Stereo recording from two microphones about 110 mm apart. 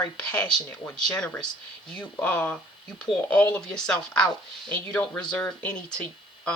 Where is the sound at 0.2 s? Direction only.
10° left (ahead or behind).